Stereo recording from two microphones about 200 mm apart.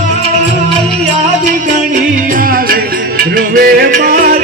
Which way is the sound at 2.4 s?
45° right (ahead or behind).